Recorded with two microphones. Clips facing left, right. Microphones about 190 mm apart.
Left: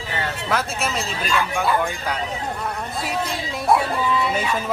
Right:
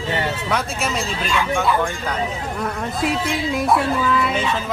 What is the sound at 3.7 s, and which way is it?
Speech, centre (ahead or behind).